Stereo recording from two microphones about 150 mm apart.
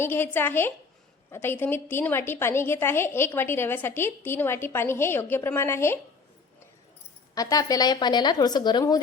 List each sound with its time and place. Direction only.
0.0 s a woman's voice: 15° left (ahead or behind)
7.3 s speech: 25° left (ahead or behind)